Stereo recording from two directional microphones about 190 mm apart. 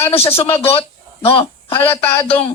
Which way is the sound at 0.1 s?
30° left (ahead or behind).